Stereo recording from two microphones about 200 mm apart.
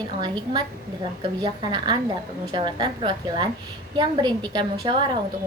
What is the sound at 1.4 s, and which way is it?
A woman's voice, 20° right (ahead or behind).